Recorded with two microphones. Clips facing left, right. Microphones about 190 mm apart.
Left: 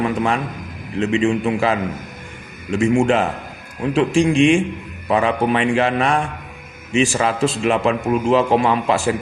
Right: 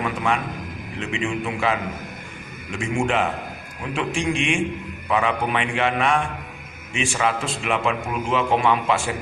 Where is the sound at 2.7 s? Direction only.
35° left (ahead or behind).